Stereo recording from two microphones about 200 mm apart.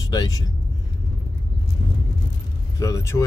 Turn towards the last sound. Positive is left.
turn(degrees=15)  # may be behind; listen again after turning